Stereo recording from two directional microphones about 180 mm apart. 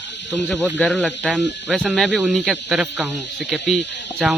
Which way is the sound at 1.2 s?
5° right (ahead or behind).